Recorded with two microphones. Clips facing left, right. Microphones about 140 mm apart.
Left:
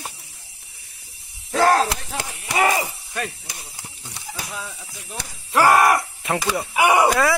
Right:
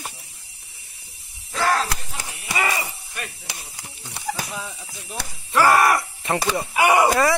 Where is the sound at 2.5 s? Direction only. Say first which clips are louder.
Left 5 dB; 50° left (ahead or behind).